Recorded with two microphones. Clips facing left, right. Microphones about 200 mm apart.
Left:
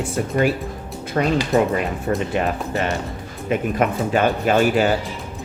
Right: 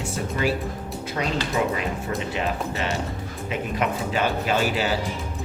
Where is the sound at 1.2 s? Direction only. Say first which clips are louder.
Left 7 dB; 55° left (ahead or behind).